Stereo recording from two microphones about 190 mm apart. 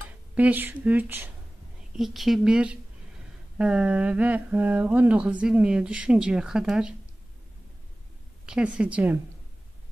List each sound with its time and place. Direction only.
0.3 s speech: 10° right (ahead or behind)
8.5 s speech: 5° right (ahead or behind)